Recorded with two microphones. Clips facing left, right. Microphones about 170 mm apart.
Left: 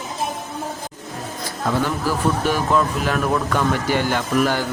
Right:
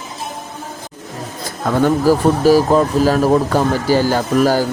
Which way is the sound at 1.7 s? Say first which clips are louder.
Right 10 dB; 50° right (ahead or behind).